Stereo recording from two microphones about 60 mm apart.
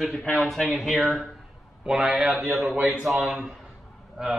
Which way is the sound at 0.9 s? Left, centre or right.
Centre.